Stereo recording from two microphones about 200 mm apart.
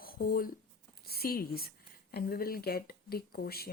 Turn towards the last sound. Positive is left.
turn(degrees=50)  # may be behind; listen again after turning